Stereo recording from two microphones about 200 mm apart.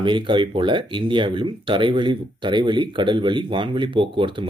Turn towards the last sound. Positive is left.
turn(degrees=-25)  # may be behind; listen again after turning